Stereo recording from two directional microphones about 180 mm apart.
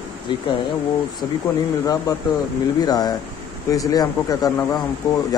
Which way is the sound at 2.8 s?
20° left (ahead or behind).